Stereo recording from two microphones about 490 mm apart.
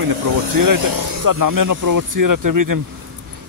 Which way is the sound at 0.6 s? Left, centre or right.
Right.